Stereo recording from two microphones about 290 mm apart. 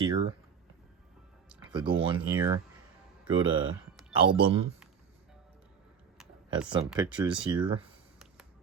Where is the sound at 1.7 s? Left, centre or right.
Centre.